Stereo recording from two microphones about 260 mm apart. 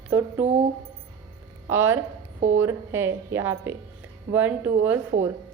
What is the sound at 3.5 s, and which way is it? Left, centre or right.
Speech, right.